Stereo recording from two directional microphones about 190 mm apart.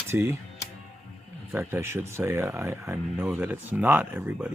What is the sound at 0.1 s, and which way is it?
Music, 15° right (ahead or behind).